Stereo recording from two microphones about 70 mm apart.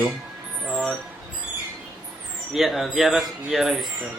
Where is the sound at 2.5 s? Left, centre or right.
Centre.